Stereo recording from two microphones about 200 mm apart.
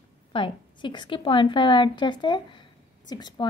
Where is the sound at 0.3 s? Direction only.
25° left (ahead or behind).